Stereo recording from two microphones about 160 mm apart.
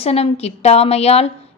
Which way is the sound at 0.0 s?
40° left (ahead or behind).